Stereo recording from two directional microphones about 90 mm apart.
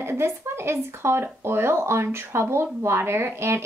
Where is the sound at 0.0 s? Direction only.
25° right (ahead or behind).